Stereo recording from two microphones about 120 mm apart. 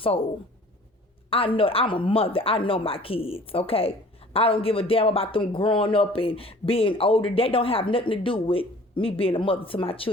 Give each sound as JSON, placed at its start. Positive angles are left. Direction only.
{"t": 0.0, "sound": "a woman's voice", "side_deg": 50}
{"t": 1.3, "sound": "a woman's voice", "side_deg": 50}